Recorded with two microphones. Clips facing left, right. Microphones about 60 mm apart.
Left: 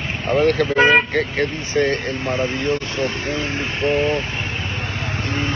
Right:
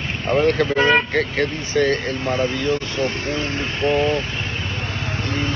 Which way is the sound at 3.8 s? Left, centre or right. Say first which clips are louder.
Even; centre.